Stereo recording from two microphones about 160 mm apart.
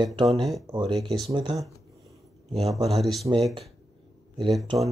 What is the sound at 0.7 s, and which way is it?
Speech, 30° right (ahead or behind).